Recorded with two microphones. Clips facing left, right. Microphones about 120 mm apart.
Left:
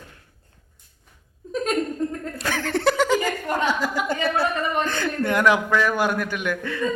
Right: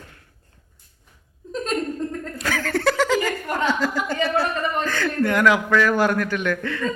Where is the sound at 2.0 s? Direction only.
10° left (ahead or behind).